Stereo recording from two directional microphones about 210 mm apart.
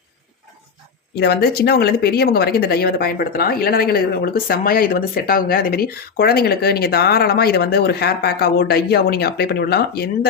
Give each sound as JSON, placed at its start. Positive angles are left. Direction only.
{"t": 1.2, "sound": "speech", "side_deg": 50}